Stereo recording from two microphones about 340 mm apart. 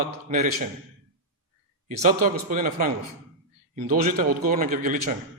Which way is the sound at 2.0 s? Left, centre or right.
Right.